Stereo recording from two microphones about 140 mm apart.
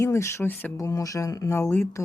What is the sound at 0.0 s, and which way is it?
Speech, 20° left (ahead or behind).